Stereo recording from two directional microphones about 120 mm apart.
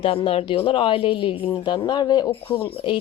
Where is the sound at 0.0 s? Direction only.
50° left (ahead or behind).